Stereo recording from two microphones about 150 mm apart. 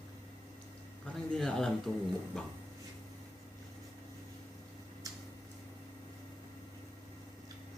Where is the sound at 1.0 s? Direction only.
5° left (ahead or behind).